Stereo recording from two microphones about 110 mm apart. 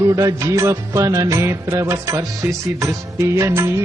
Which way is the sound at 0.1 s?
30° right (ahead or behind).